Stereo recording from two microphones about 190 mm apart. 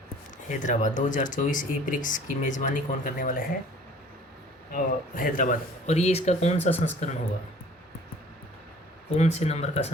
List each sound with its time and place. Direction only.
0.4 s speech: 40° left (ahead or behind)
4.7 s speech: 45° left (ahead or behind)
6.6 s speech: 10° left (ahead or behind)
9.1 s speech: 35° left (ahead or behind)